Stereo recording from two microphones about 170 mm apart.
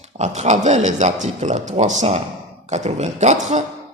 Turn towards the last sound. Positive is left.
turn(degrees=-45)  # may be behind; listen again after turning